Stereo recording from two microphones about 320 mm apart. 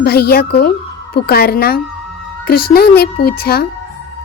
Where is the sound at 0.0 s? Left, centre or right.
Left.